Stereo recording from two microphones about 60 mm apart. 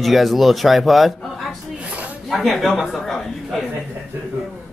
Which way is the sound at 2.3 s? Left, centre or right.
Centre.